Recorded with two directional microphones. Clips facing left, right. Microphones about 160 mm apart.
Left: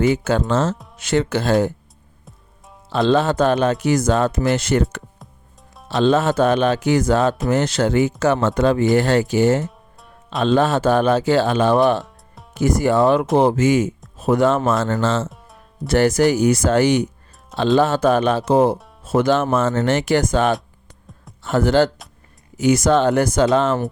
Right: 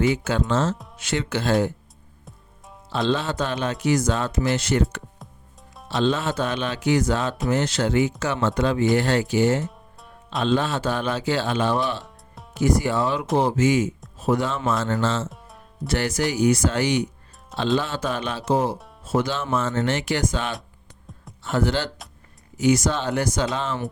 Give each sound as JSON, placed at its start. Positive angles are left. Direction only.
{"t": 0.1, "sound": "speech", "side_deg": 45}
{"t": 3.1, "sound": "speech", "side_deg": 50}
{"t": 12.0, "sound": "music", "side_deg": 0}
{"t": 12.5, "sound": "speech", "side_deg": 45}
{"t": 15.3, "sound": "music", "side_deg": 0}
{"t": 15.9, "sound": "speech", "side_deg": 45}